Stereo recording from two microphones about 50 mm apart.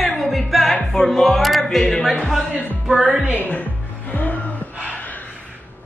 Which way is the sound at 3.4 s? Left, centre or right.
Left.